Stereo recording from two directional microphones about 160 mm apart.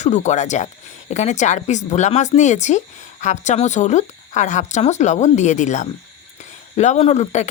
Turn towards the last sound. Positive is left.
turn(degrees=45)  # may be behind; listen again after turning